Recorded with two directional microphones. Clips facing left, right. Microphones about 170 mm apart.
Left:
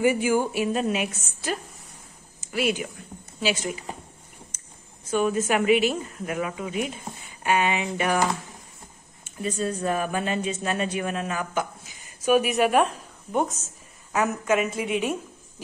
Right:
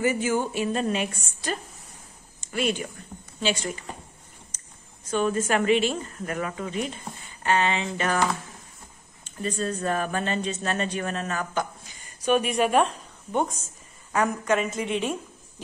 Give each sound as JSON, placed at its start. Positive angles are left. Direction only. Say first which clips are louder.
{"t": 0.0, "sound": "speech", "louder": "left 3 dB", "side_deg": 10}
{"t": 5.0, "sound": "speech", "louder": "left 1 dB", "side_deg": 10}